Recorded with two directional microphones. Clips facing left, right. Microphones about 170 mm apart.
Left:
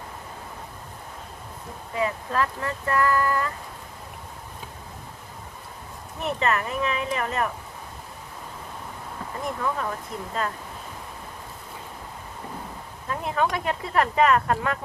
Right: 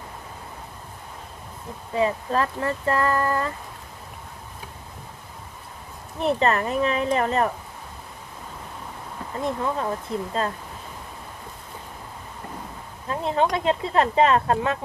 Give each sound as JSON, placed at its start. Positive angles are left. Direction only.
{"t": 1.9, "sound": "speech", "side_deg": -30}
{"t": 6.1, "sound": "speech", "side_deg": -35}
{"t": 9.4, "sound": "speech", "side_deg": -25}
{"t": 13.1, "sound": "speech", "side_deg": -25}